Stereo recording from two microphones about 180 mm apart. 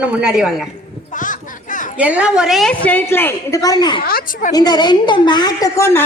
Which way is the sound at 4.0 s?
55° left (ahead or behind).